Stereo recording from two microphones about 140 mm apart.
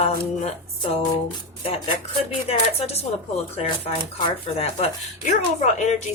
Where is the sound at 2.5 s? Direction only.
45° left (ahead or behind).